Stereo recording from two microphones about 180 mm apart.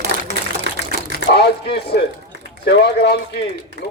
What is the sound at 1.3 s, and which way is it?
Speech, 65° left (ahead or behind).